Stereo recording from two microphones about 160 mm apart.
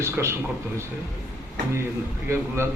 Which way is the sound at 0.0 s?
15° right (ahead or behind).